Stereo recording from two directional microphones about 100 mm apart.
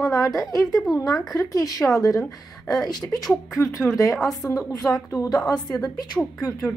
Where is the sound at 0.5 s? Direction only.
35° left (ahead or behind).